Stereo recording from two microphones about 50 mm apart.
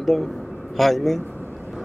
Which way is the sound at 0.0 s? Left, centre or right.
Centre.